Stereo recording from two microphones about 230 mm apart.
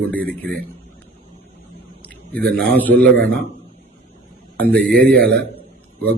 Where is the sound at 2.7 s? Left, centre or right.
Centre.